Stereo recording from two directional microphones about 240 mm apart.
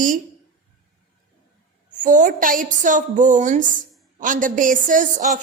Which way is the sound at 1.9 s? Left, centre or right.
Right.